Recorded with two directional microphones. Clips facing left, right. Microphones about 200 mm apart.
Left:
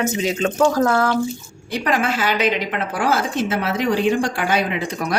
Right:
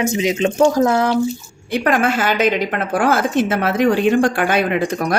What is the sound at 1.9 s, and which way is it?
A woman's voice, 50° right (ahead or behind).